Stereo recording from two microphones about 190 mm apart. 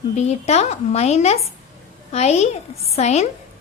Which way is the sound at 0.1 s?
35° left (ahead or behind).